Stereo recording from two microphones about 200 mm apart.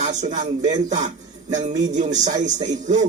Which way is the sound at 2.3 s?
20° right (ahead or behind).